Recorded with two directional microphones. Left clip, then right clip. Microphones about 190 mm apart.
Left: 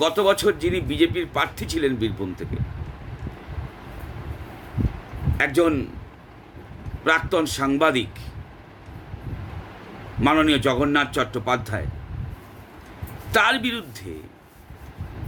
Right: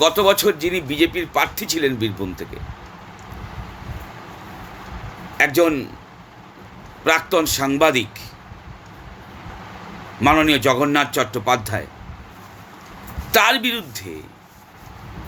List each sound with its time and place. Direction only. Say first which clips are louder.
0.0 s a man's voice: right 4 dB; 15° left (ahead or behind)
5.4 s a man's voice: right 4 dB; 15° left (ahead or behind)
7.0 s a man's voice: right 3 dB; 15° left (ahead or behind)
10.2 s a man's voice: right 4 dB; 15° left (ahead or behind)
13.3 s a man's voice: right 4 dB; 15° left (ahead or behind)